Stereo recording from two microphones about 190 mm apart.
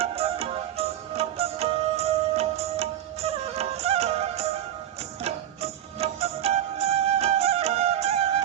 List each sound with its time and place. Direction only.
0.0 s music: 30° right (ahead or behind)